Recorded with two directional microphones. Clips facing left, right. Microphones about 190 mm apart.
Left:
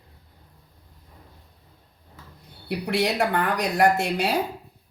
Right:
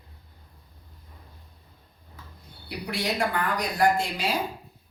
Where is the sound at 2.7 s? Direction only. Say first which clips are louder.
Left 6 dB; 70° left (ahead or behind).